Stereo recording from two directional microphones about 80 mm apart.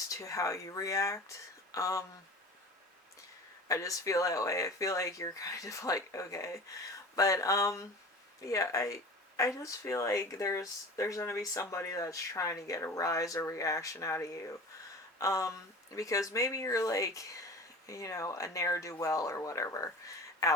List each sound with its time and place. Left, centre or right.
0.1 s speech: left
3.7 s speech: left